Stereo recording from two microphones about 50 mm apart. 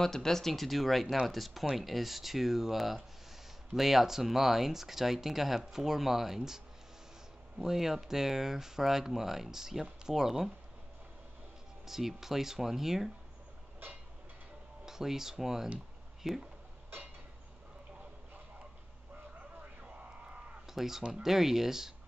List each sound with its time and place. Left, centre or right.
0.0 s speech: centre
11.8 s speech: centre
14.9 s speech: centre
19.8 s a sound: right
20.6 s a sound: centre
21.1 s speech: centre